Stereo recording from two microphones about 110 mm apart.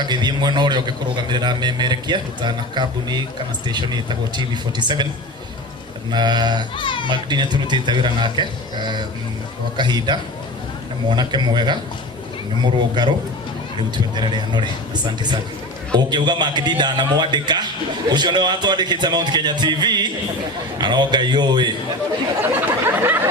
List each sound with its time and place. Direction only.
0.0 s a man's voice: 40° right (ahead or behind)
6.1 s a man's voice: 40° right (ahead or behind)
6.7 s a child's voice: 50° left (ahead or behind)
7.1 s a man's voice: 40° right (ahead or behind)
14.2 s a man's voice: 40° right (ahead or behind)
22.6 s a sound: 20° right (ahead or behind)